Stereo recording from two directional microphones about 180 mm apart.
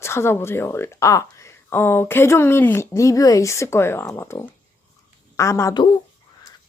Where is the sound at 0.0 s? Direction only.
15° left (ahead or behind).